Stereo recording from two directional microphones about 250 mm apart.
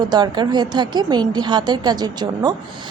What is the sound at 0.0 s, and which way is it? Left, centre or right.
A woman's voice, centre.